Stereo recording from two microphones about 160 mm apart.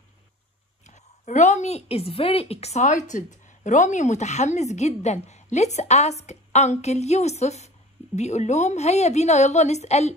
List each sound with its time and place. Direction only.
0.8 s a woman's voice: 45° left (ahead or behind)